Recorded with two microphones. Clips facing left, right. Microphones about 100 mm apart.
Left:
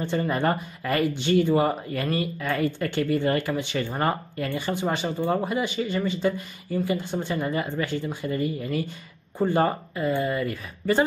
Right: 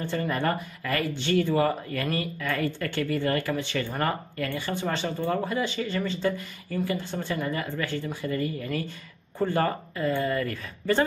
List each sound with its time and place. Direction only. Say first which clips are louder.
0.0 s speech: left 3 dB; 20° left (ahead or behind)